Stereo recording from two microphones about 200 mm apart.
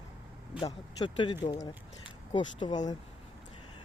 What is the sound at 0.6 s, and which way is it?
Speech, 25° left (ahead or behind).